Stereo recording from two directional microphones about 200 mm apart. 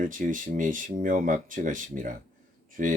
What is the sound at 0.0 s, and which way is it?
Speech, 40° right (ahead or behind).